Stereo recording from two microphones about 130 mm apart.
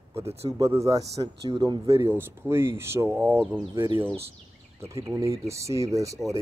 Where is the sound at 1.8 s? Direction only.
20° right (ahead or behind).